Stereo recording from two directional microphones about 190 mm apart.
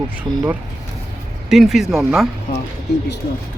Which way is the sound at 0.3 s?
25° right (ahead or behind).